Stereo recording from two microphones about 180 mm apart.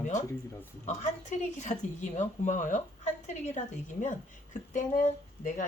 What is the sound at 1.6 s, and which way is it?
Speech, 40° left (ahead or behind).